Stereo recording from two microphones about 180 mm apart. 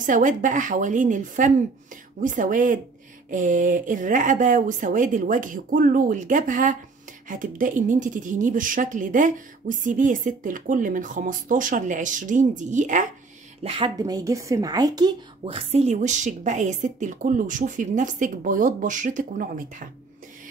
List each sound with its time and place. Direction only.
0.0 s speech: 45° right (ahead or behind)
13.6 s speech: 30° right (ahead or behind); by 19.9 s 50° right (ahead or behind)